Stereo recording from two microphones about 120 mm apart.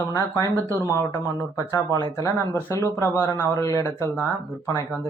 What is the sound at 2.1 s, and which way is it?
Speech, 25° left (ahead or behind).